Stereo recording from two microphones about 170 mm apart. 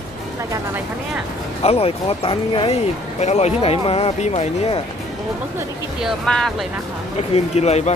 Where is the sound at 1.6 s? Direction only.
35° left (ahead or behind).